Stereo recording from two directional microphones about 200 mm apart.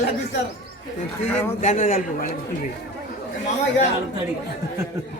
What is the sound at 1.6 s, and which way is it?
Speech, 35° left (ahead or behind).